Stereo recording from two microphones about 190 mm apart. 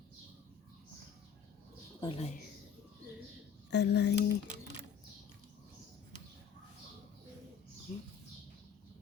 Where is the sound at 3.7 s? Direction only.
60° left (ahead or behind).